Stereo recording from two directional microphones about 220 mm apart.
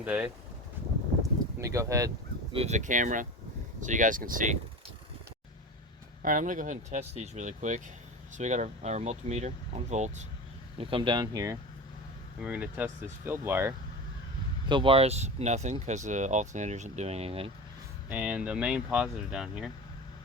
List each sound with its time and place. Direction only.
0.0 s speech: 5° right (ahead or behind)
1.5 s speech: 15° right (ahead or behind); by 4.5 s 35° right (ahead or behind)
6.2 s speech: 35° right (ahead or behind); by 13.7 s 10° right (ahead or behind)
14.7 s speech: 25° right (ahead or behind)
18.1 s speech: 5° right (ahead or behind)